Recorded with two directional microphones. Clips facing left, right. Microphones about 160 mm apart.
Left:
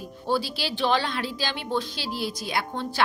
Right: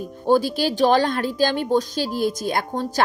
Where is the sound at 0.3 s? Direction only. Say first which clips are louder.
Right 8 dB; 45° right (ahead or behind).